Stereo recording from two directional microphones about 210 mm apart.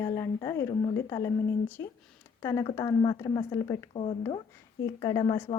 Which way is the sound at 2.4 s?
15° left (ahead or behind).